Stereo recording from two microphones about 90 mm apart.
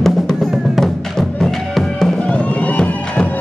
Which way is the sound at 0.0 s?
5° left (ahead or behind).